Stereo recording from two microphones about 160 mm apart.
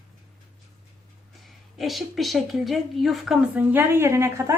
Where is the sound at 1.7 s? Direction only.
Centre (ahead or behind).